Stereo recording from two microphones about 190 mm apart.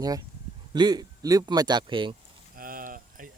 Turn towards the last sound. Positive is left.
turn(degrees=-45)  # may be behind; listen again after turning